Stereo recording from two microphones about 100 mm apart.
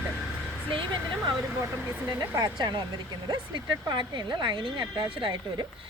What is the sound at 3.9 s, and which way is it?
A woman's voice, 50° right (ahead or behind).